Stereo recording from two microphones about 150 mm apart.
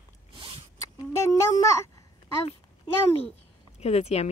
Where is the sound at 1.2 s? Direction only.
20° left (ahead or behind).